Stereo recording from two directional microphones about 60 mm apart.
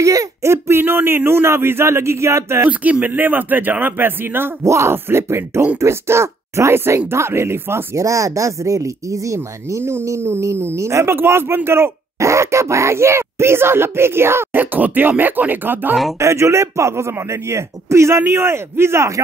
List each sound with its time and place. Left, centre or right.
0.0 s speech: right
0.4 s speech: right
2.6 s speech: right
4.6 s speech: right
11.1 s speech: right
16.2 s speech: right